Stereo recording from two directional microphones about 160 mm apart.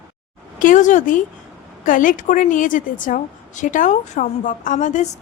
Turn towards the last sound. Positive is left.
turn(degrees=50)  # may be behind; listen again after turning